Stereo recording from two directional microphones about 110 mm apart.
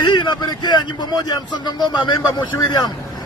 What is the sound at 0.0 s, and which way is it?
A man's voice, 45° left (ahead or behind).